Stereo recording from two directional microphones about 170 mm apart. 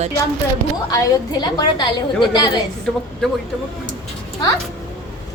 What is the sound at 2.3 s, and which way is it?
Speech, 25° left (ahead or behind).